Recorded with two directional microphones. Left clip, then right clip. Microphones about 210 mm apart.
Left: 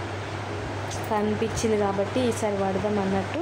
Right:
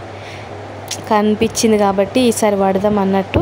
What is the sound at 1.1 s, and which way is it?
Speech, 50° right (ahead or behind).